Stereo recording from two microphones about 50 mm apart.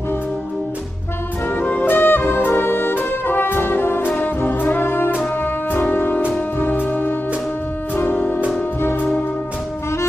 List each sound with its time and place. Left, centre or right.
1.8 s music: left
4.4 s brass instrument: left
5.4 s music: left